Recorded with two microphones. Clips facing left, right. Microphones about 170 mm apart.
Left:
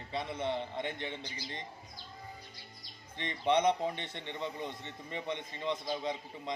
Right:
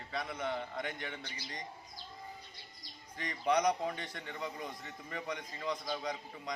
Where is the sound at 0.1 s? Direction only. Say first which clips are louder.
Left 3 dB; 25° left (ahead or behind).